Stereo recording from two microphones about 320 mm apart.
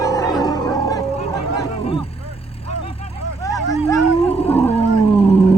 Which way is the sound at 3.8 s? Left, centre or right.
Centre.